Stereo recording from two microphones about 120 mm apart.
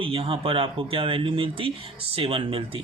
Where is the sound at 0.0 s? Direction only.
50° right (ahead or behind).